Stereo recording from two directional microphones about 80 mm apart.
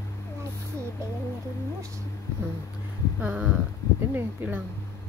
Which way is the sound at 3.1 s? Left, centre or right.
Centre.